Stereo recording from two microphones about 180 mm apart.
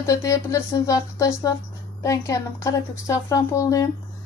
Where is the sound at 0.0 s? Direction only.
15° left (ahead or behind).